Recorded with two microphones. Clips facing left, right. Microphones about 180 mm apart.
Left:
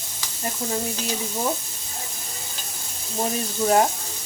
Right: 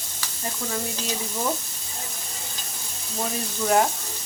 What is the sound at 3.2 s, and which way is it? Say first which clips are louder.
Speech: left 4 dB; 25° left (ahead or behind).